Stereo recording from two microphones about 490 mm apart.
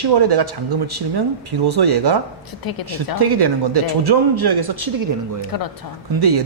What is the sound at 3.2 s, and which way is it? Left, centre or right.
Speech, right.